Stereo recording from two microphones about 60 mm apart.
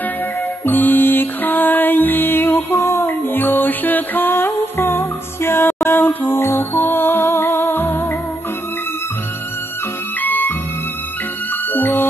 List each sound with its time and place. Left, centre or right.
0.7 s music: left
3.1 s music: left
10.2 s music: left
11.7 s music: left